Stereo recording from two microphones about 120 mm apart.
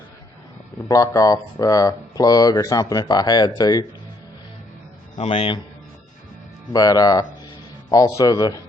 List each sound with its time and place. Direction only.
0.9 s speech: 30° left (ahead or behind)
5.1 s a man's voice: 60° left (ahead or behind)
6.7 s speech: 30° left (ahead or behind)